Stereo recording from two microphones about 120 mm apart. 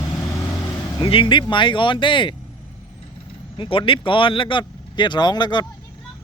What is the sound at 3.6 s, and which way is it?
Speech, 50° left (ahead or behind).